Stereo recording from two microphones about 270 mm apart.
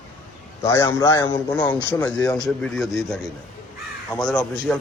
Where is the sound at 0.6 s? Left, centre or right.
Centre.